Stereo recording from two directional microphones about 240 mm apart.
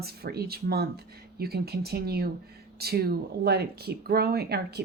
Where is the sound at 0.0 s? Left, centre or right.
Right.